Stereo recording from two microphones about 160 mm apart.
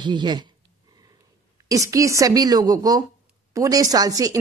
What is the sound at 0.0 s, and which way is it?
Speech, 30° right (ahead or behind).